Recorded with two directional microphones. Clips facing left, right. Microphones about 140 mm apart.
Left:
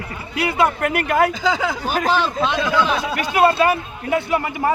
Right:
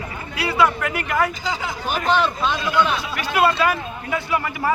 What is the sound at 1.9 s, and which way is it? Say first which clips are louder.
Speech: left 1 dB; 40° left (ahead or behind).